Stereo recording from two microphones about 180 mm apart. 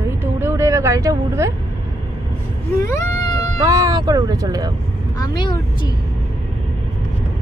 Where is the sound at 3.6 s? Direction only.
20° right (ahead or behind).